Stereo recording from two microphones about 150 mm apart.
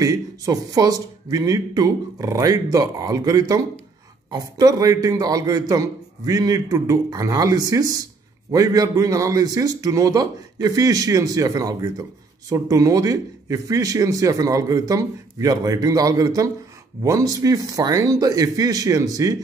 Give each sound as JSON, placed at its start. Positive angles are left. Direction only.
{"t": 0.0, "sound": "a man's voice", "side_deg": -25}